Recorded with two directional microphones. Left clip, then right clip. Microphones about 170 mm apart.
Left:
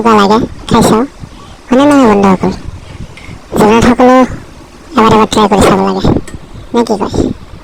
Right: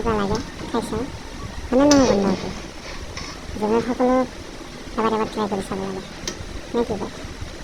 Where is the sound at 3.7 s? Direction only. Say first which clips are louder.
Left 12 dB; 90° left.